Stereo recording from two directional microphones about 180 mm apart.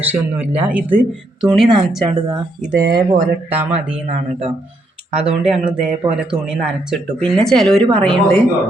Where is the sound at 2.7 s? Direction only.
65° right (ahead or behind).